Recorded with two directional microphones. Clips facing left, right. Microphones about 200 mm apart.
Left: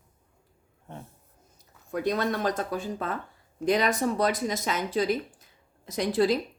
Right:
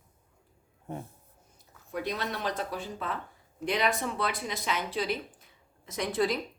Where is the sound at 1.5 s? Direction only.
45° left (ahead or behind).